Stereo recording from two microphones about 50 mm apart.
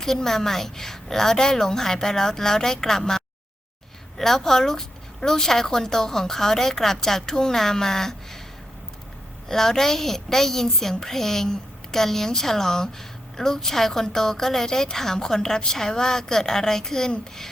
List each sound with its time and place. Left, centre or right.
0.0 s a woman's voice: centre
9.5 s a woman's voice: centre